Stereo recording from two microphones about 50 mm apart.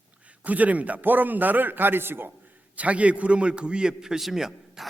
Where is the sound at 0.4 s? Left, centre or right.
Right.